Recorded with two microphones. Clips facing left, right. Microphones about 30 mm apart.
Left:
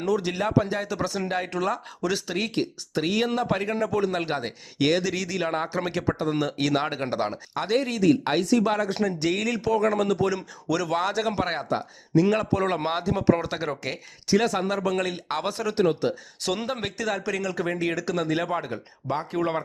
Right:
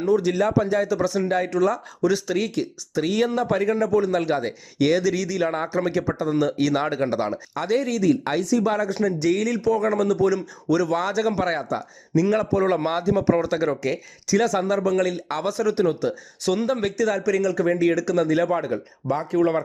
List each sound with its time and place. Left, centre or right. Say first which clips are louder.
0.2 s speech: right 4 dB; left
2.0 s speech: right 5 dB; left
4.2 s speech: right 5 dB; left
5.4 s speech: even; left
5.6 s speech: right 3 dB; left
6.9 s speech: right 4 dB; left
8.4 s speech: right 1 dB; left
10.9 s speech: right 2 dB; left
12.6 s speech: right 4 dB; left
13.1 s speech: right 1 dB; left
13.3 s speech: right 6 dB; left
15.9 s speech: right 1 dB; left
16.4 s speech: right 5 dB; left
16.6 s speech: right 6 dB; left